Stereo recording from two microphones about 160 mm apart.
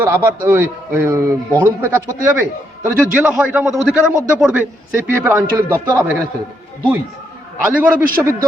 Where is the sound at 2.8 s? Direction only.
10° right (ahead or behind).